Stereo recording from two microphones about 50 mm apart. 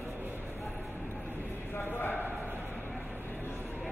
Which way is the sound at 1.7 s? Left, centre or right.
Left.